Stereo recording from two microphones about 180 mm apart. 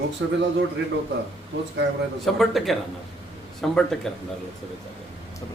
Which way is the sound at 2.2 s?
Centre (ahead or behind).